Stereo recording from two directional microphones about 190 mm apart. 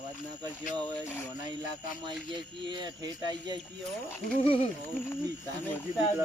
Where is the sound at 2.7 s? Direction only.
20° right (ahead or behind).